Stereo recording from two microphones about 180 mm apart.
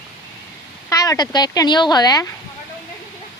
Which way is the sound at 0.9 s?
20° left (ahead or behind).